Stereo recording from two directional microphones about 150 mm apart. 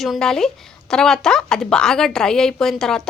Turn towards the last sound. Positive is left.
turn(degrees=5)  # may be behind; listen again after turning